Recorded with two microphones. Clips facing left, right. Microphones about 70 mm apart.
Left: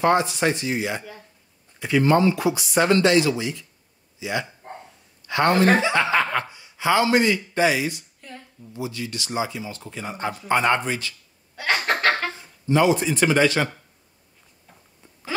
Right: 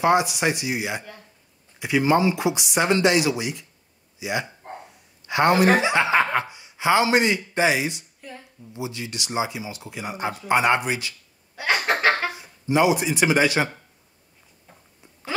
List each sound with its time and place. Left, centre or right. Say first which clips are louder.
0.0 s speech: even; centre
5.2 s a sound: right 1 dB; centre
5.5 s speech: even; centre
5.8 s speech: right 1 dB; centre
8.2 s a sound: right 1 dB; centre
8.7 s speech: left 1 dB; right
11.5 s chuckle: even; centre